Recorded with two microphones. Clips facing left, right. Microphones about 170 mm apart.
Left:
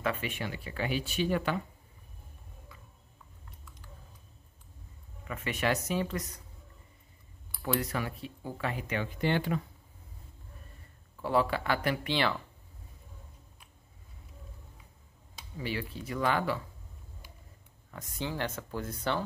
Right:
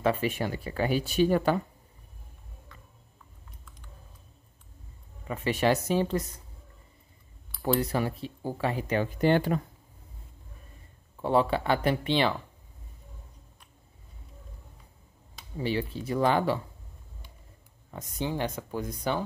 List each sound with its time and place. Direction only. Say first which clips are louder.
0.0 s speech: right 7 dB; 35° right (ahead or behind)
5.2 s speech: right 6 dB; 30° right (ahead or behind)
7.6 s speech: right 5 dB; 30° right (ahead or behind)
11.1 s speech: right 4 dB; 25° right (ahead or behind)
15.5 s speech: right 6 dB; 30° right (ahead or behind)
17.9 s speech: right 4 dB; 20° right (ahead or behind)